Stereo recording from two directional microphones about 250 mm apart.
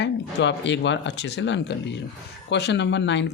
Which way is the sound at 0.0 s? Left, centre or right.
Left.